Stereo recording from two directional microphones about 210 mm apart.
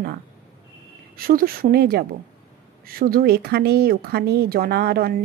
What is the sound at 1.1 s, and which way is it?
Speech, 45° right (ahead or behind).